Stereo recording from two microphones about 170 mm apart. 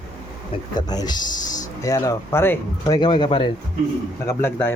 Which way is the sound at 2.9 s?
25° left (ahead or behind).